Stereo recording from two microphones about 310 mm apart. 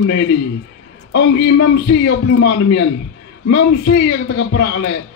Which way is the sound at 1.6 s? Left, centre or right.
Left.